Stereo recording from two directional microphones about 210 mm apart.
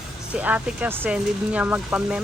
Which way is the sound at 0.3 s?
5° right (ahead or behind).